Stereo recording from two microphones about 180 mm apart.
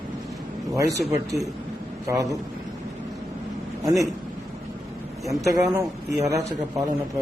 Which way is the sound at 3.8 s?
20° right (ahead or behind).